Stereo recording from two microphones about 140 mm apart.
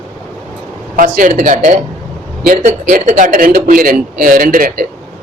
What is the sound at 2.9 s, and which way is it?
A man's voice, 80° right.